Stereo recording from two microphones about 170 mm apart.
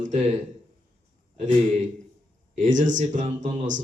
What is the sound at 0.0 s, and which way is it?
Speech, 45° right (ahead or behind).